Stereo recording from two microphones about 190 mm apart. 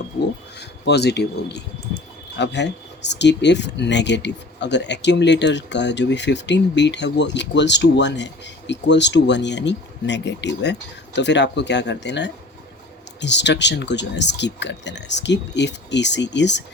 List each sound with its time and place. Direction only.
0.6 s speech: 60° left (ahead or behind)